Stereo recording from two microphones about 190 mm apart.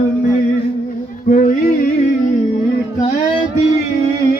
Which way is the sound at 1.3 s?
45° left (ahead or behind).